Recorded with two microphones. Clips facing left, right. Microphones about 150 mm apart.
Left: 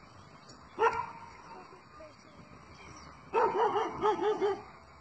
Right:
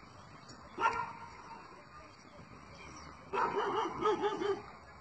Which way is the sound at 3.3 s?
55° left (ahead or behind).